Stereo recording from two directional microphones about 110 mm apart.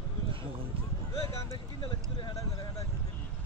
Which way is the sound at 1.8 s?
50° left (ahead or behind).